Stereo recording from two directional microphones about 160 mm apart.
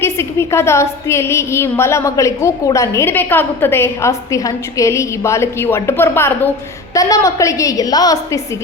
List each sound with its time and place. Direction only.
0.0 s a woman's voice: 15° left (ahead or behind)